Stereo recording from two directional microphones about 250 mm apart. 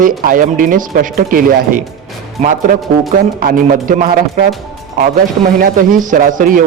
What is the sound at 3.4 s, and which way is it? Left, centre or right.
Speech, right.